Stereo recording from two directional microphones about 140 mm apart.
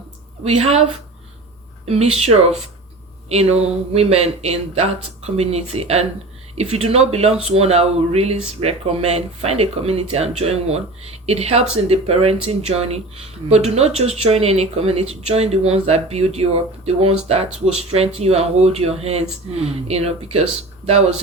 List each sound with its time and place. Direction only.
0.4 s speech: 45° right (ahead or behind)
1.9 s speech: 50° right (ahead or behind)